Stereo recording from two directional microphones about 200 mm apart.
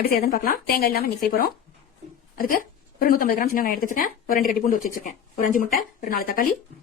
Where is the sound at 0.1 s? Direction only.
50° left (ahead or behind).